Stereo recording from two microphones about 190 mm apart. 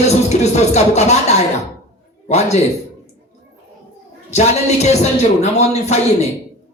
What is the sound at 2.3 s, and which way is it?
Speech, 35° left (ahead or behind).